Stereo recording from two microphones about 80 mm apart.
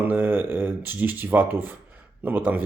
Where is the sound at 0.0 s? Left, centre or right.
Right.